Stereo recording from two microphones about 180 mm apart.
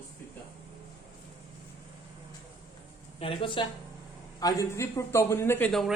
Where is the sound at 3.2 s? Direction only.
30° left (ahead or behind).